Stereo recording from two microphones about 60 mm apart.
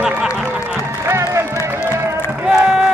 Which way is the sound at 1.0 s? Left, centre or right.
Right.